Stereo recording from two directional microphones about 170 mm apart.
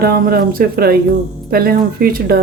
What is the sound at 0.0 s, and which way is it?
Speech, 65° right (ahead or behind).